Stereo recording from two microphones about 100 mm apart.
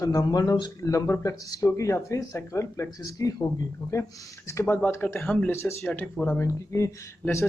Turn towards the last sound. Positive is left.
turn(degrees=25)  # may be behind; listen again after turning